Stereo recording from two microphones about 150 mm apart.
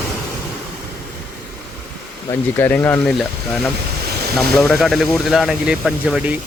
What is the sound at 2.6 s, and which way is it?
Speech, 10° left (ahead or behind).